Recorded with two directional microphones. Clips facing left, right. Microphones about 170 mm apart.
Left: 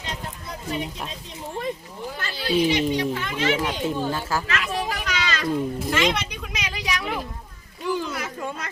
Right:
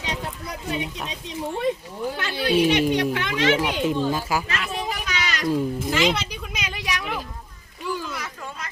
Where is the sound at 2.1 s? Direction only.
65° right (ahead or behind).